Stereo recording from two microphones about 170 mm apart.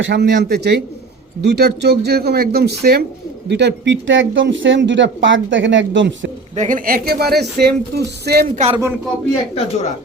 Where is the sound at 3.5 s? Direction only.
85° right.